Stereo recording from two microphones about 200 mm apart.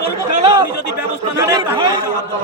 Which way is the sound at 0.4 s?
15° right (ahead or behind).